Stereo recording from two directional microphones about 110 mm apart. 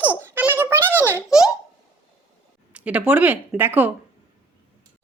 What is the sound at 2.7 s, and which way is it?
Speech, 10° right (ahead or behind).